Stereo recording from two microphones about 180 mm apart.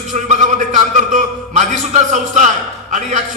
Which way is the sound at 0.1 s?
45° right (ahead or behind).